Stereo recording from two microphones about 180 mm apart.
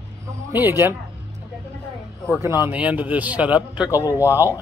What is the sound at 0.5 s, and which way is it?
Speech, 10° right (ahead or behind).